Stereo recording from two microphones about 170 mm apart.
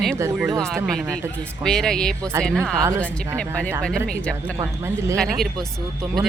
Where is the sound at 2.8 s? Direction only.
15° right (ahead or behind).